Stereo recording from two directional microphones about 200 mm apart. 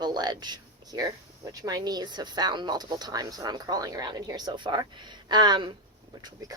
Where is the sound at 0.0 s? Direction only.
20° right (ahead or behind).